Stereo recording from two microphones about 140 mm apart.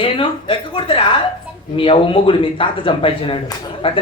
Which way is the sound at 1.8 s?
40° left (ahead or behind).